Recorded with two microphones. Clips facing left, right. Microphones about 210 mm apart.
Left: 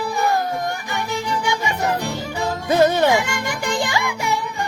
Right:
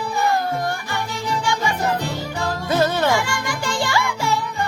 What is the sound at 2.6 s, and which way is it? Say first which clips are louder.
Music: left 4 dB; 15° left (ahead or behind).